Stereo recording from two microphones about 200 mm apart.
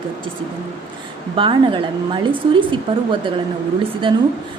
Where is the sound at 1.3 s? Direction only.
25° right (ahead or behind).